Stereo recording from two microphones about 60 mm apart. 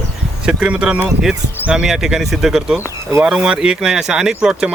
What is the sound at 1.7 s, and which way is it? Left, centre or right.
Speech, centre.